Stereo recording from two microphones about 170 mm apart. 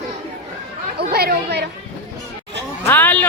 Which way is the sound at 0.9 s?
70° right (ahead or behind).